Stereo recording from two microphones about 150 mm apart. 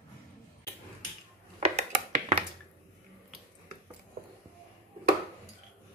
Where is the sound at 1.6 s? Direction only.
45° right (ahead or behind).